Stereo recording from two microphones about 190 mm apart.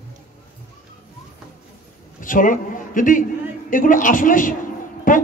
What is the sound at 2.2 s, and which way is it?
A man's voice, 45° left (ahead or behind).